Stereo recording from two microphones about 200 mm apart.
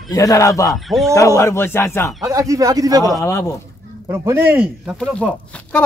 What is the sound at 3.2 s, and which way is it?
Speech, 15° left (ahead or behind).